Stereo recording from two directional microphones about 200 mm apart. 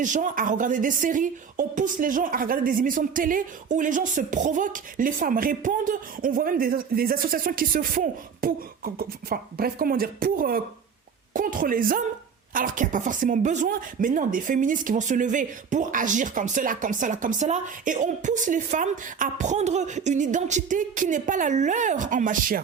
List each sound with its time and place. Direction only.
0.0 s a woman's voice: 40° right (ahead or behind)